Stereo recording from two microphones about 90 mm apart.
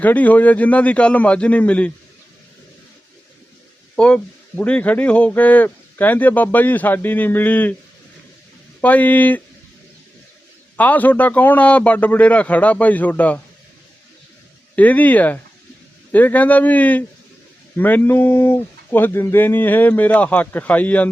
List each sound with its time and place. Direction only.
0.0 s a man's voice: 20° left (ahead or behind)
3.9 s speech: 15° left (ahead or behind)
8.8 s a man's voice: 15° left (ahead or behind)
10.8 s a man's voice: 15° left (ahead or behind)
14.8 s a man's voice: 15° left (ahead or behind)